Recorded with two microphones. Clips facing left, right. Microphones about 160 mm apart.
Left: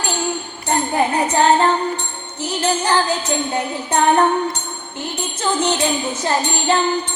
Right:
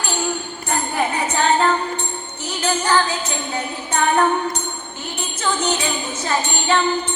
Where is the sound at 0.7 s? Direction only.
35° left (ahead or behind).